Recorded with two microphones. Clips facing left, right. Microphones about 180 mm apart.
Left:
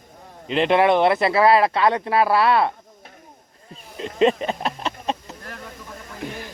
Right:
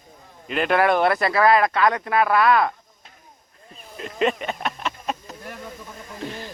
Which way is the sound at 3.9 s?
30° left (ahead or behind).